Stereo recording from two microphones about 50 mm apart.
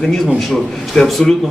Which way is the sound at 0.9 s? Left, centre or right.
Centre.